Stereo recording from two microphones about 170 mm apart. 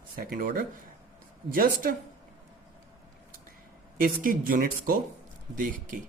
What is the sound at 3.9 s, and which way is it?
Speech, 55° right (ahead or behind).